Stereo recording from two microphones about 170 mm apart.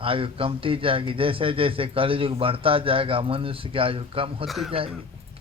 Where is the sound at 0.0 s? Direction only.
30° right (ahead or behind).